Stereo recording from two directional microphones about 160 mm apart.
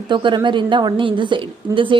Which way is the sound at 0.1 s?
30° right (ahead or behind).